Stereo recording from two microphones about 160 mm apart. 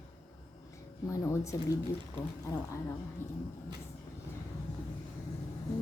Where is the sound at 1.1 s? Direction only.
20° left (ahead or behind).